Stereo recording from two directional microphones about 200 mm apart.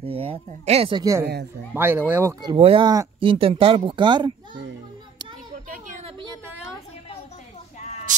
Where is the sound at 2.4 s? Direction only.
25° right (ahead or behind).